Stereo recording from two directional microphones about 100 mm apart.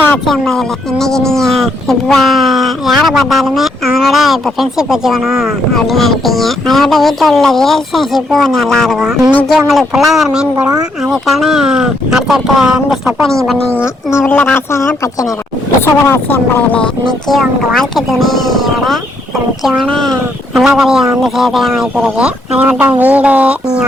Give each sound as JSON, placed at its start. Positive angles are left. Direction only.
{"t": 0.3, "sound": "speech", "side_deg": 5}
{"t": 10.7, "sound": "speech", "side_deg": -35}
{"t": 11.1, "sound": "speech", "side_deg": -5}
{"t": 14.3, "sound": "speech", "side_deg": 20}
{"t": 17.2, "sound": "speech", "side_deg": 0}